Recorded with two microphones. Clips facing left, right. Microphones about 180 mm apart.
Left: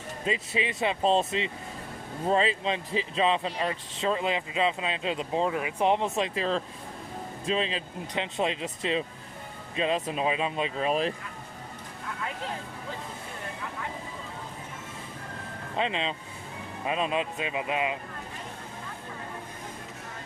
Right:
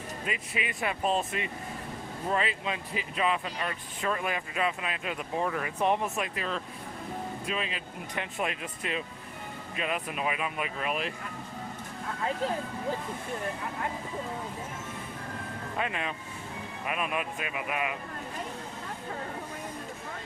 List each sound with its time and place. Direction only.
0.3 s speech: 25° left (ahead or behind)
15.8 s speech: 20° left (ahead or behind)